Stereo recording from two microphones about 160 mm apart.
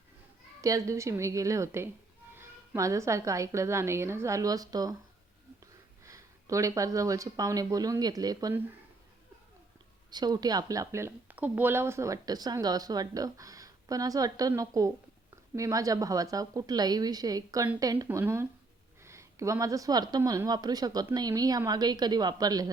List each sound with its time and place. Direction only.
0.6 s speech: 20° right (ahead or behind)
6.1 s speech: 20° right (ahead or behind)
10.1 s speech: 25° right (ahead or behind)